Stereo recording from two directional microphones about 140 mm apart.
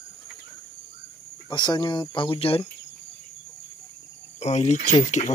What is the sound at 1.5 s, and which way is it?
Speech, 30° left (ahead or behind).